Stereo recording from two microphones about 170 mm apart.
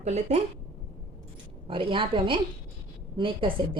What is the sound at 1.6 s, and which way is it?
Speech, 30° right (ahead or behind).